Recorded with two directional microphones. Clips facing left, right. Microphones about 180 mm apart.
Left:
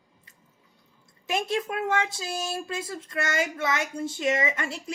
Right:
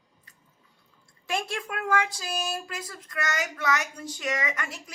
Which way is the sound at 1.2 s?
20° left (ahead or behind).